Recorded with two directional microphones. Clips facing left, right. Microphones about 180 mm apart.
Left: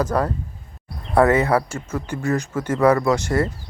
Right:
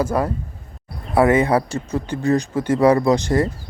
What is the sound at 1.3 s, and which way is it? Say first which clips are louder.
Speech: right 2 dB; 25° right (ahead or behind).